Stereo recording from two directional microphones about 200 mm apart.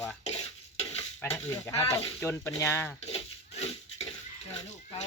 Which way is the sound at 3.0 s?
30° left (ahead or behind).